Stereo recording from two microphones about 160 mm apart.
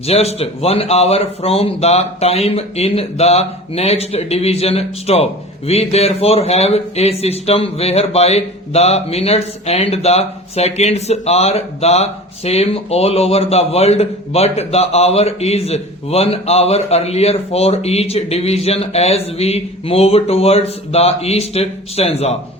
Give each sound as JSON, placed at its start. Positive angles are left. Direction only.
{"t": 0.1, "sound": "speech", "side_deg": 40}